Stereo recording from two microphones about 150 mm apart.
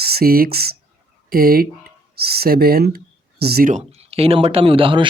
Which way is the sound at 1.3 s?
80° right.